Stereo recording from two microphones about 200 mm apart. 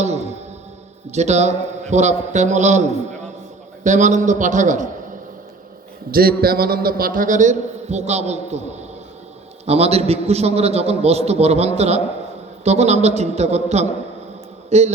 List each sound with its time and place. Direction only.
0.0 s a man's voice: 35° right (ahead or behind)
6.1 s a man's voice: 50° right (ahead or behind); by 14.9 s 35° right (ahead or behind)